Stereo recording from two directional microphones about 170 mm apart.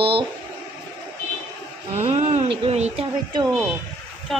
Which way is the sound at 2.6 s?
35° right (ahead or behind).